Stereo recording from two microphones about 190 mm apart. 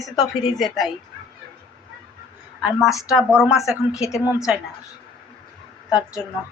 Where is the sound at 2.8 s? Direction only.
15° left (ahead or behind).